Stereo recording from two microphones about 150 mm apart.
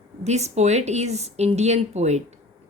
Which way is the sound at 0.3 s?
50° right (ahead or behind).